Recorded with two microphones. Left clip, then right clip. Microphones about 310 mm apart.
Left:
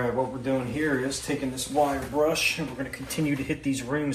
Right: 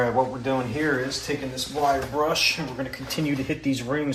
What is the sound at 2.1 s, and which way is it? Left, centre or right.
Speech, centre.